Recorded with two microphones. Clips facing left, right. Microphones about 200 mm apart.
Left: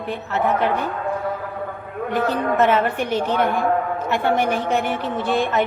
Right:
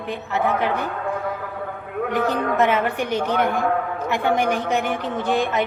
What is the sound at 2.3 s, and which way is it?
A woman's voice, 15° right (ahead or behind).